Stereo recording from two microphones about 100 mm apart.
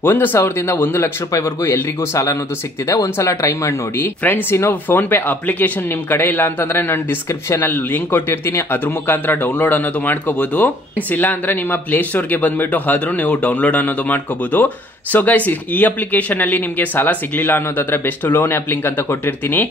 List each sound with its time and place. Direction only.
0.0 s speech: 20° left (ahead or behind)